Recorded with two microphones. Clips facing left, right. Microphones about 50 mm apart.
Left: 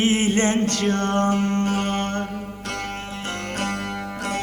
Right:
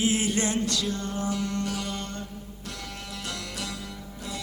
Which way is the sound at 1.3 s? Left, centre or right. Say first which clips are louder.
Left 8 dB; left.